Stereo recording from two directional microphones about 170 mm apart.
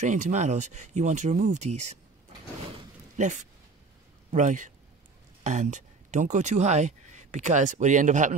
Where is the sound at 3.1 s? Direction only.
45° right (ahead or behind).